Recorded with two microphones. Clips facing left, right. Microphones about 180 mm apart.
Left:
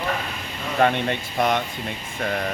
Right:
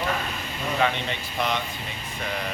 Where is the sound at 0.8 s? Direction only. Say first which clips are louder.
Left 6 dB; 55° left (ahead or behind).